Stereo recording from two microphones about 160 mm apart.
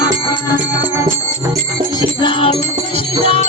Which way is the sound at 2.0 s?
30° left (ahead or behind).